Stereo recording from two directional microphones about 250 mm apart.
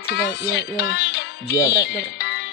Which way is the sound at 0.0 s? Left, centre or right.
Left.